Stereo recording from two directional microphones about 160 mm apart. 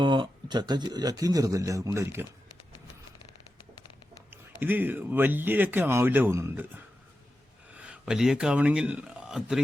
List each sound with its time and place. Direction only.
0.0 s speech: 30° right (ahead or behind)
4.3 s speech: 10° right (ahead or behind)